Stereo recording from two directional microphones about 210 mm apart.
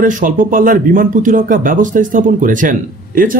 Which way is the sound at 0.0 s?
40° right (ahead or behind).